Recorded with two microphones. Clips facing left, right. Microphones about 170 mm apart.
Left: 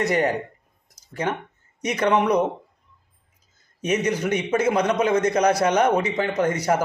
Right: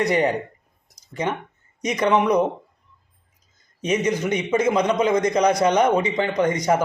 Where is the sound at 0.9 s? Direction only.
10° left (ahead or behind).